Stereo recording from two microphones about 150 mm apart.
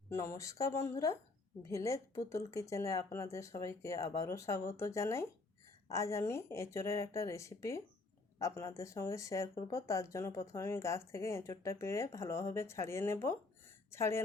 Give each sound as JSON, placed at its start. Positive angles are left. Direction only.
{"t": 0.1, "sound": "speech", "side_deg": 20}